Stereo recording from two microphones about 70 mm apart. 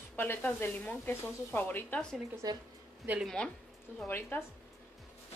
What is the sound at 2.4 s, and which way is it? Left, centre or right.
Speech, right.